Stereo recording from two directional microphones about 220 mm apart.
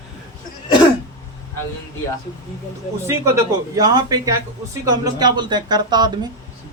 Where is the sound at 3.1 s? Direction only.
15° right (ahead or behind).